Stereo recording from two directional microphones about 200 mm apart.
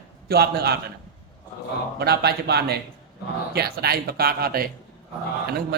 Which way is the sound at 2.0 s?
55° right (ahead or behind).